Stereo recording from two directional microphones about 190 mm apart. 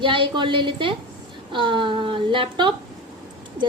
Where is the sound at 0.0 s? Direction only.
25° right (ahead or behind).